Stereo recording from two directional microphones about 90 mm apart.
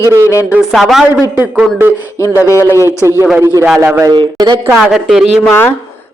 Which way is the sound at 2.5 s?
30° left (ahead or behind).